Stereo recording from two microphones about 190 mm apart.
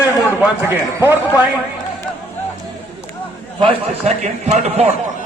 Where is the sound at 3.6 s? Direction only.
35° right (ahead or behind).